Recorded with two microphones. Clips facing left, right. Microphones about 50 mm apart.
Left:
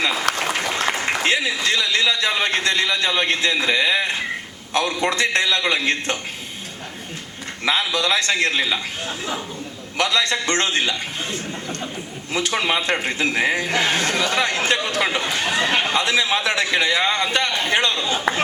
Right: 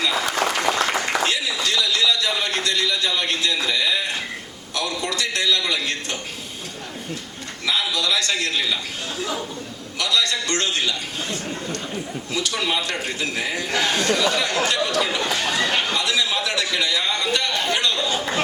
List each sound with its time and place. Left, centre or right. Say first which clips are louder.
0.3 s applause: left 1 dB; left
1.0 s a sound: left 2 dB; left
4.7 s a man's voice: left 5 dB; left
7.6 s a man's voice: left 3 dB; left
10.0 s a man's voice: left 2 dB; left